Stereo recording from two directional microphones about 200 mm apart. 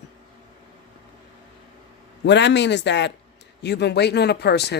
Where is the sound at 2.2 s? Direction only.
60° left (ahead or behind).